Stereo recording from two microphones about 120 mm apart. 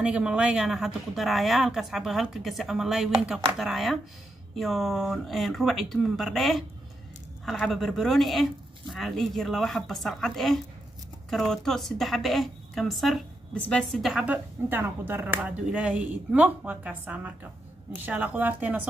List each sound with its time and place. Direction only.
0.0 s a woman's voice: 10° right (ahead or behind); by 14.0 s 10° left (ahead or behind)
14.0 s speech: 10° right (ahead or behind)